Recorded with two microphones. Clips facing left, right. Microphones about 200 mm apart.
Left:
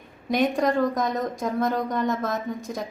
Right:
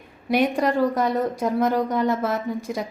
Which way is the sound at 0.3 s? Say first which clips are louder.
Right 1 dB; 10° right (ahead or behind).